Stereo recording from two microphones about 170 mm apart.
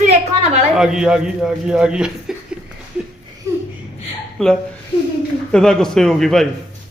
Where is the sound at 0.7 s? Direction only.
5° right (ahead or behind).